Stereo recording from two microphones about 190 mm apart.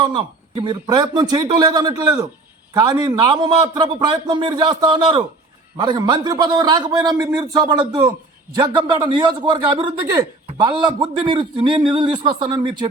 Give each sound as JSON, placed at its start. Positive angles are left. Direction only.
{"t": 0.0, "sound": "a man's voice", "side_deg": -25}